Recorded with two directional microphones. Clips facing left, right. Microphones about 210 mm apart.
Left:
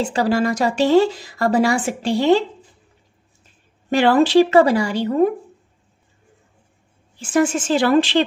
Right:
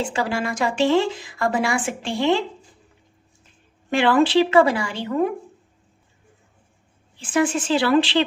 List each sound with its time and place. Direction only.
0.0 s a woman's voice: 40° left (ahead or behind)
3.9 s a woman's voice: 40° left (ahead or behind)
7.2 s a woman's voice: 45° left (ahead or behind)